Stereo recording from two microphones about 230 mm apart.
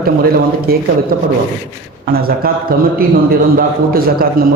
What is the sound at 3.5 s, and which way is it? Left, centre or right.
Speech, right.